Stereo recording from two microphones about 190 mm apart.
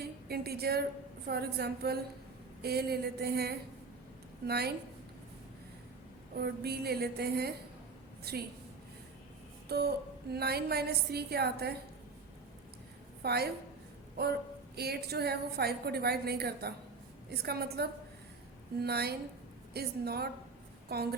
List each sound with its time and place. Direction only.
0.0 s a woman's voice: 55° right (ahead or behind)
6.3 s a woman's voice: 55° right (ahead or behind)
9.6 s music: 55° right (ahead or behind)
10.3 s a woman's voice: 55° right (ahead or behind)
13.2 s a woman's voice: 55° right (ahead or behind)
14.8 s a woman's voice: 55° right (ahead or behind)